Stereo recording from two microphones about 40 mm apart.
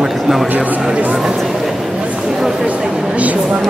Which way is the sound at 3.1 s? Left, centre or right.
Right.